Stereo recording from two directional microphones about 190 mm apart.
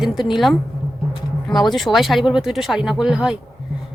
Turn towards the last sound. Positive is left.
turn(degrees=-5)  # may be behind; listen again after turning